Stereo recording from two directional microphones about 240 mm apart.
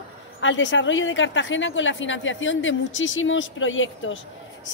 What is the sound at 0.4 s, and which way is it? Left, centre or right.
A woman's voice, left.